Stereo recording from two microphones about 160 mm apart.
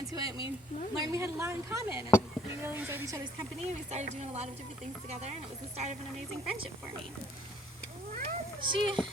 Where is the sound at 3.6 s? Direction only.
45° right (ahead or behind).